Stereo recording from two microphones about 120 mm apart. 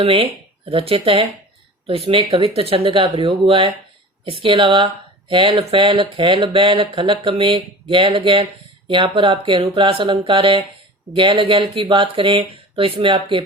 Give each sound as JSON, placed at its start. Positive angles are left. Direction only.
{"t": 0.0, "sound": "speech", "side_deg": -50}